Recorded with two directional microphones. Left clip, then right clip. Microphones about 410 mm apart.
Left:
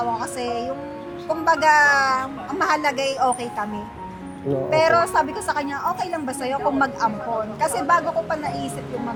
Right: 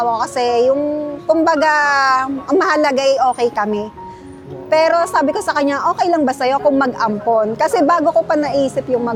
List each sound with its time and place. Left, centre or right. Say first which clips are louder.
0.0 s a woman's voice: right 9 dB; right